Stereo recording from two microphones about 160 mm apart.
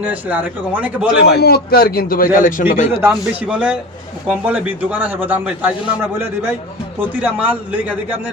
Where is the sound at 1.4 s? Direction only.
75° left (ahead or behind); by 2.8 s 55° left (ahead or behind).